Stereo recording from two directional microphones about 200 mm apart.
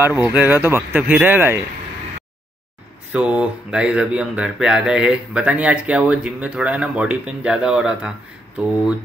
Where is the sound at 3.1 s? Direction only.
5° right (ahead or behind).